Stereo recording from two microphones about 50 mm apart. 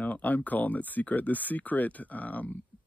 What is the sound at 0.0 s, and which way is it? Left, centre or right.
Speech, left.